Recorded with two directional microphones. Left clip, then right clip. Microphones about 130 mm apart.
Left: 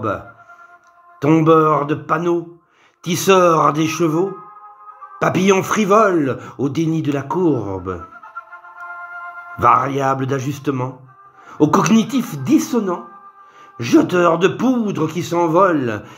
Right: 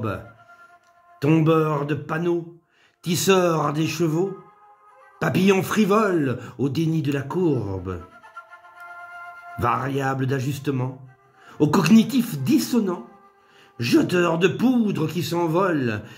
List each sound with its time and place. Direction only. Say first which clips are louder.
1.2 s speech: left 7 dB; 35° right (ahead or behind)
9.6 s speech: left 9 dB; 35° right (ahead or behind)